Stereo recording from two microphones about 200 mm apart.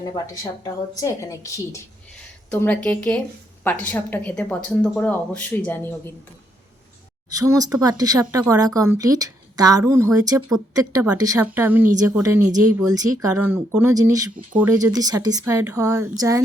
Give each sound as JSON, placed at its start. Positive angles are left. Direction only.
{"t": 0.9, "sound": "speech", "side_deg": 15}
{"t": 7.3, "sound": "speech", "side_deg": -15}
{"t": 14.3, "sound": "speech", "side_deg": -5}
{"t": 14.9, "sound": "speech", "side_deg": -20}